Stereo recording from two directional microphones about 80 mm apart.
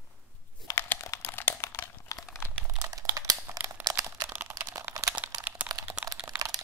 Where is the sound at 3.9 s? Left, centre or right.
Right.